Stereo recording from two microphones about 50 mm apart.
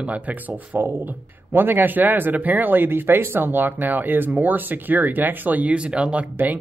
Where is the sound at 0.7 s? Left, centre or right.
Right.